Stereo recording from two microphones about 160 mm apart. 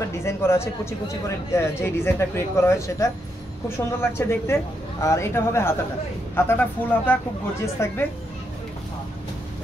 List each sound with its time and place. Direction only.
0.2 s speech: 15° left (ahead or behind)